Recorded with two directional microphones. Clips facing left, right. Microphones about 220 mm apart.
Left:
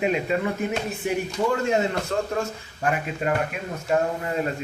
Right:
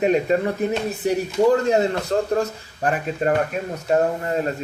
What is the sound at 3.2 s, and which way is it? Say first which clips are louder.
Speech: right 5 dB; 40° right (ahead or behind).